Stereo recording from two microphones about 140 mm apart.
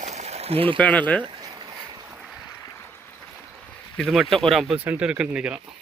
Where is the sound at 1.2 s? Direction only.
30° right (ahead or behind).